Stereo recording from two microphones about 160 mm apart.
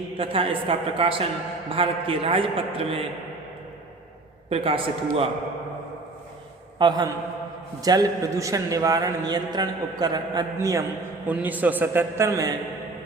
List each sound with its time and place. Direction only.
0.2 s a man's voice: 35° right (ahead or behind)
4.4 s a man's voice: 35° right (ahead or behind)
6.7 s a man's voice: 25° right (ahead or behind)